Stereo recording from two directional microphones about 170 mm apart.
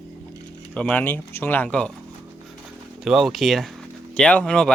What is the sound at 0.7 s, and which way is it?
Speech, 5° left (ahead or behind).